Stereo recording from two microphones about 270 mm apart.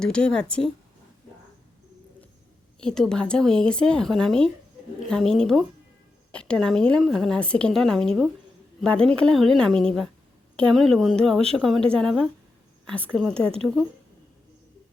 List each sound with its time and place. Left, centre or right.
0.0 s a woman's voice: centre
2.8 s a woman's voice: centre
12.8 s a sound: centre
13.1 s a woman's voice: centre